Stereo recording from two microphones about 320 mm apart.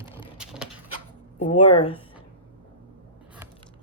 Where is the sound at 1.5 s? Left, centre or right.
Left.